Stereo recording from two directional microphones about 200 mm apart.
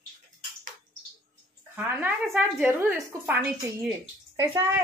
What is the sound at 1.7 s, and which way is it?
Speech, 10° right (ahead or behind).